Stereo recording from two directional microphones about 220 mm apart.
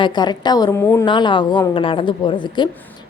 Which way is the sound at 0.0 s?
20° left (ahead or behind).